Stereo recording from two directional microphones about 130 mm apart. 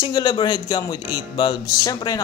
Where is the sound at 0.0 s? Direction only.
30° left (ahead or behind).